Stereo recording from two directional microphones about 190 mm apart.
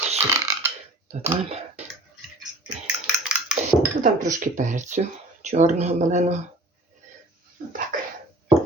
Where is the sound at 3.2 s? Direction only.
5° right (ahead or behind).